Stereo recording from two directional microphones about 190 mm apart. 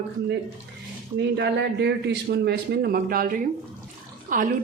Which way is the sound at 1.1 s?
65° right (ahead or behind).